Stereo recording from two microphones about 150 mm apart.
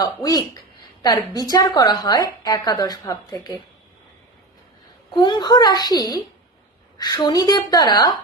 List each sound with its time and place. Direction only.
0.0 s a woman's voice: 25° left (ahead or behind)
5.1 s a woman's voice: 30° left (ahead or behind)